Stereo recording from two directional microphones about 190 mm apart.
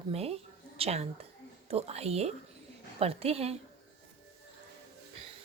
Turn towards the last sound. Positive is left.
turn(degrees=-30)  # may be behind; listen again after turning